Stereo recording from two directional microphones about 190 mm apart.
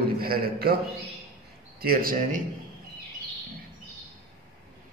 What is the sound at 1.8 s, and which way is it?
Speech, 50° right (ahead or behind).